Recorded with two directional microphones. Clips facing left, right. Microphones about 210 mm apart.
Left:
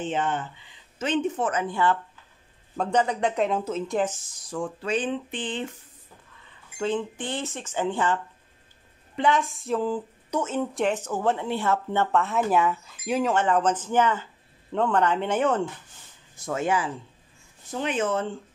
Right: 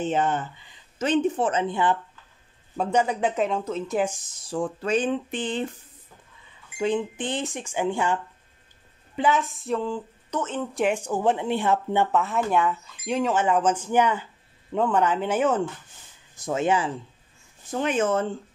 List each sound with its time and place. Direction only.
0.0 s speech: 40° right (ahead or behind); by 2.0 s 20° right (ahead or behind)
2.8 s speech: 10° right (ahead or behind)
4.4 s speech: 30° right (ahead or behind)
4.8 s a sound: 45° right (ahead or behind)
6.8 s speech: 15° right (ahead or behind); by 10.8 s 10° left (ahead or behind)
10.8 s speech: 10° right (ahead or behind)
12.1 s speech: centre (ahead or behind)
16.3 s speech: 20° right (ahead or behind)
17.6 s a sound: 45° right (ahead or behind)